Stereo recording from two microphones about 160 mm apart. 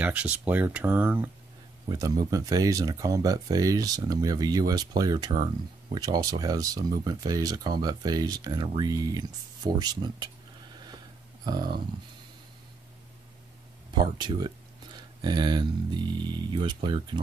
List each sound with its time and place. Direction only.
0.0 s speech: 10° right (ahead or behind)
1.9 s speech: 25° right (ahead or behind)
11.4 s speech: 25° right (ahead or behind)
13.9 s speech: 30° right (ahead or behind)